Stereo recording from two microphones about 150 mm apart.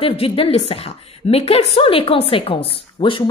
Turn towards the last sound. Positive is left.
turn(degrees=35)  # may be behind; listen again after turning